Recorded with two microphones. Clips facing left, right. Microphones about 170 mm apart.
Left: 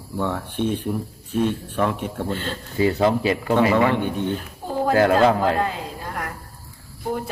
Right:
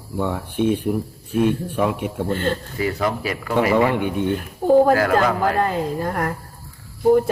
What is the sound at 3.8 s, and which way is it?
Speech, 10° right (ahead or behind).